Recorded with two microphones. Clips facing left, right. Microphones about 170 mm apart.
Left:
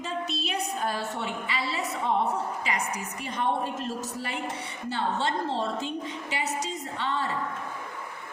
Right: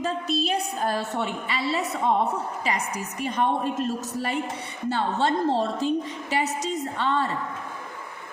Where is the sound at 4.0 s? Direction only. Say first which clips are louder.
Right 5 dB; 40° right (ahead or behind).